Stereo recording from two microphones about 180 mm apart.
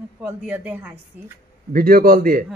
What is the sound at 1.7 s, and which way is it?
Speech, 55° right (ahead or behind).